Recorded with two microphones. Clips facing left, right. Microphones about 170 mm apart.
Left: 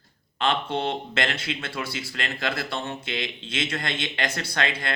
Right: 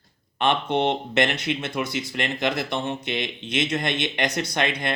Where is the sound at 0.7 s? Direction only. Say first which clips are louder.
Right 5 dB; 20° right (ahead or behind).